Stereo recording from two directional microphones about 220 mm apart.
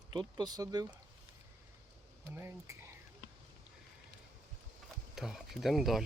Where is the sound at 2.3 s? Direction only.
10° right (ahead or behind).